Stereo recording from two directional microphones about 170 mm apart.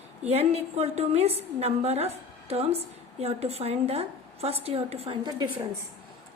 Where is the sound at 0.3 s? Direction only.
40° right (ahead or behind).